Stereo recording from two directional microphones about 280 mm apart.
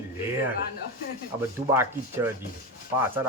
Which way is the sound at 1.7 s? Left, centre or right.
Centre.